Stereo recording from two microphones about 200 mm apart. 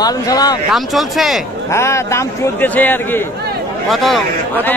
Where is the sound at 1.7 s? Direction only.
15° left (ahead or behind).